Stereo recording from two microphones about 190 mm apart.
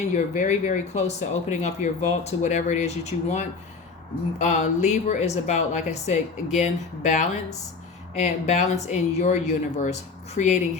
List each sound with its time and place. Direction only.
0.1 s speech: 40° left (ahead or behind)